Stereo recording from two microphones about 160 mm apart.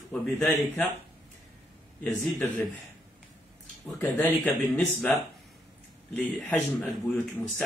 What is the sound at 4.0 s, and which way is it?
Speech, 10° left (ahead or behind).